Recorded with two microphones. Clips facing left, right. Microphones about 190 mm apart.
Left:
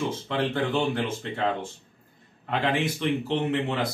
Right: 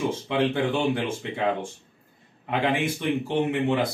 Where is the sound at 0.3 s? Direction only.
10° right (ahead or behind).